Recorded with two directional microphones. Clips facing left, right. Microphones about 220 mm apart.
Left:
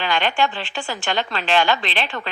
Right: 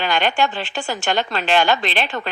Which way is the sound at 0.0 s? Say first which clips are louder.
Right 1 dB; 45° right (ahead or behind).